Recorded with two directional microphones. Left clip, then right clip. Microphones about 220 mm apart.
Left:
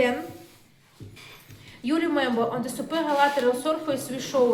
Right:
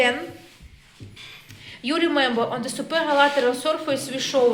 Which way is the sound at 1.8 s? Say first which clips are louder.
Right 4 dB; 30° right (ahead or behind).